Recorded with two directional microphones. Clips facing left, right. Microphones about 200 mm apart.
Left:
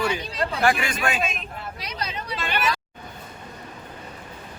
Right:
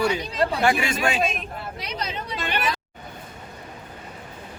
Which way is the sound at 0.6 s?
20° right (ahead or behind).